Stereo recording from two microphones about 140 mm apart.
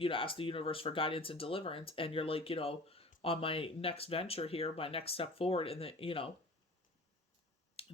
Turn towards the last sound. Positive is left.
turn(degrees=45)  # may be behind; listen again after turning